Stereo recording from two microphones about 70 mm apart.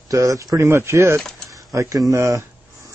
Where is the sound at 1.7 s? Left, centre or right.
Right.